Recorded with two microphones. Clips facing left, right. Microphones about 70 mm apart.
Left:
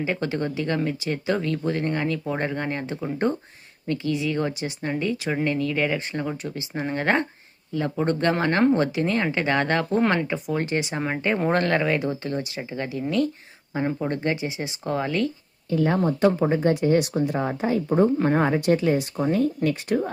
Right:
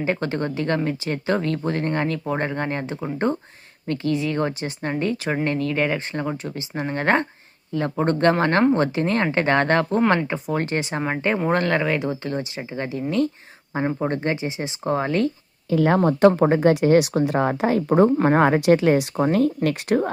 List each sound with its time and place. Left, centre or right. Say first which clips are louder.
0.0 s speech: right 2 dB; right
11.0 s speech: right 2 dB; right
15.7 s speech: right 4 dB; right
16.0 s speech: right 5 dB; right